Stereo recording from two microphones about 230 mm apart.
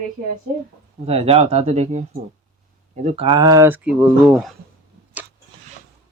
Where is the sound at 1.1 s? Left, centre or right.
Right; by 4.6 s centre.